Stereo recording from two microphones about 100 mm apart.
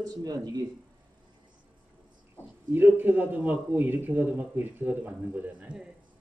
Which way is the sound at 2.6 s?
20° right (ahead or behind).